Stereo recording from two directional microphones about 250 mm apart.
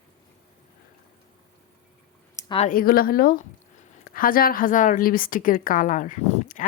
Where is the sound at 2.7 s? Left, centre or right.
Left.